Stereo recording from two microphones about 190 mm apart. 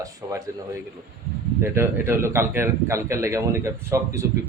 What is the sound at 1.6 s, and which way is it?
A man's voice, 10° right (ahead or behind).